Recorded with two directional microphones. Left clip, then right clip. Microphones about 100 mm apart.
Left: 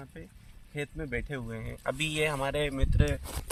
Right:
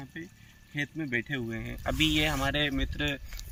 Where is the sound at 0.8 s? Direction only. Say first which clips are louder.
Right 3 dB; 45° left (ahead or behind).